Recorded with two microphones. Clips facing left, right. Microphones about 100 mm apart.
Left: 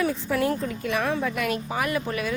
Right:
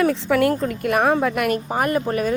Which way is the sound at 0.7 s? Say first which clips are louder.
Right 7 dB; 55° right (ahead or behind).